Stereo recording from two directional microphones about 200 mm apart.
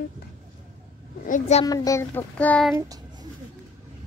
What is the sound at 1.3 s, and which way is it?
Speech, 35° left (ahead or behind).